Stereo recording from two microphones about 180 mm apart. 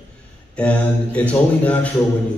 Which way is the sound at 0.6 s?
5° left (ahead or behind).